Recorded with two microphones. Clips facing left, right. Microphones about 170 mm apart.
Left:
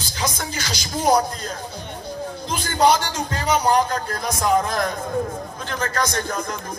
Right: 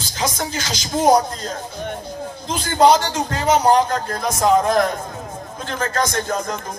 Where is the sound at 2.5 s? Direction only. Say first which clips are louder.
Right 4 dB; 50° right (ahead or behind).